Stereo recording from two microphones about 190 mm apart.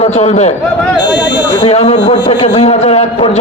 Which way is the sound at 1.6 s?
35° left (ahead or behind).